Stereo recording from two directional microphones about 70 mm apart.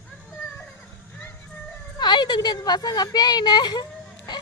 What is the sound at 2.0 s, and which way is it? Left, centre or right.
A woman's voice, left.